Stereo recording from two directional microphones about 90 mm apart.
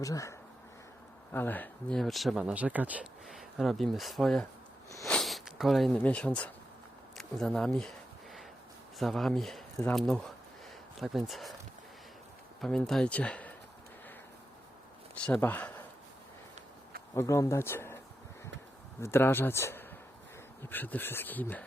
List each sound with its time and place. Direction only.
0.0 s speech: 40° left (ahead or behind)
1.3 s speech: 20° left (ahead or behind)
1.9 s speech: centre (ahead or behind)
2.4 s speech: 15° right (ahead or behind)
3.2 s speech: centre (ahead or behind)
5.2 s a sound: centre (ahead or behind)
6.0 s speech: 15° left (ahead or behind)
7.2 s a sound: 5° left (ahead or behind)
9.0 s speech: centre (ahead or behind)
12.6 s speech: 5° left (ahead or behind)
15.4 s speech: 20° left (ahead or behind)
17.2 s speech: 35° left (ahead or behind)
19.0 s speech: 25° left (ahead or behind)